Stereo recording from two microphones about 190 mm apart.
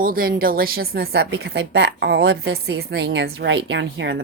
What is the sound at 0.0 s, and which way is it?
A woman's voice, 50° right (ahead or behind).